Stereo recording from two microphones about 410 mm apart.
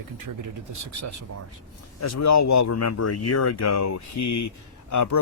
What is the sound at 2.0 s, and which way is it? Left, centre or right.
Speech, left.